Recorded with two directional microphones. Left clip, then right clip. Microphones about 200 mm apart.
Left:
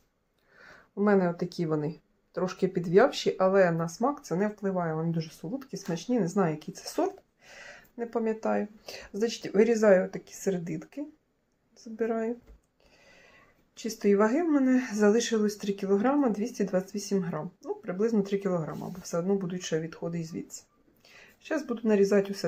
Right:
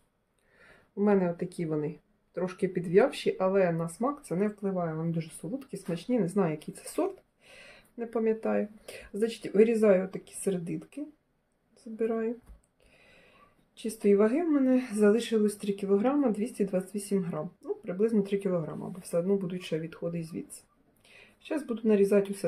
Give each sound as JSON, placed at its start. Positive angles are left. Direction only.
{"t": 0.9, "sound": "speech", "side_deg": 5}
{"t": 13.8, "sound": "speech", "side_deg": 0}
{"t": 20.4, "sound": "speech", "side_deg": 30}
{"t": 21.4, "sound": "speech", "side_deg": 0}